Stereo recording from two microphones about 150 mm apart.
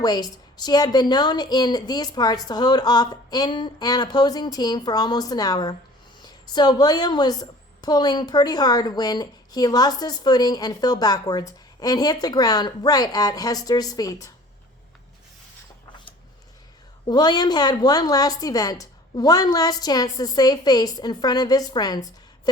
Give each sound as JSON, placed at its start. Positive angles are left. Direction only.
{"t": 0.0, "sound": "a woman's voice", "side_deg": 25}
{"t": 17.1, "sound": "a woman's voice", "side_deg": 30}